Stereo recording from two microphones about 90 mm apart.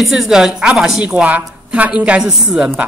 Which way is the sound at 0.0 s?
5° right (ahead or behind).